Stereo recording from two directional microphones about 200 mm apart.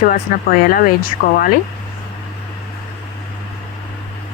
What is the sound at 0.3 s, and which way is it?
Speech, 40° left (ahead or behind).